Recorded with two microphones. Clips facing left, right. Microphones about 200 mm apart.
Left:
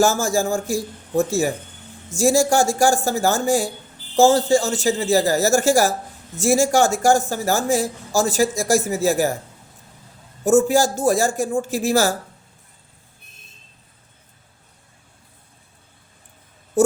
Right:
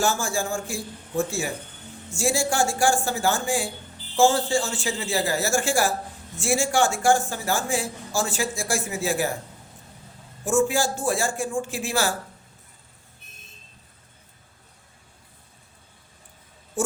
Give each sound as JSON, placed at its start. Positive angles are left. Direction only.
{"t": 0.0, "sound": "speech", "side_deg": 40}
{"t": 10.4, "sound": "speech", "side_deg": 40}
{"t": 16.8, "sound": "a sound", "side_deg": 40}